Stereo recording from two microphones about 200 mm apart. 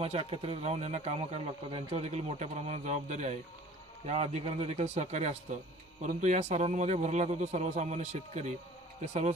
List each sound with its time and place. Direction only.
0.0 s speech: 30° right (ahead or behind)